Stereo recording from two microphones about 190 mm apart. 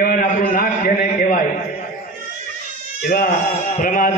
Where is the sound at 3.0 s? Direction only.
55° left (ahead or behind).